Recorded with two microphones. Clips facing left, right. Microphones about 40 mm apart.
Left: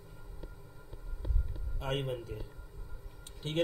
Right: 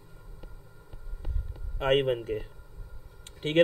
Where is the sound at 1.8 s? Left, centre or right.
Right.